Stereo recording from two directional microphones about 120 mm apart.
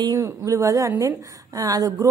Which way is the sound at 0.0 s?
25° right (ahead or behind).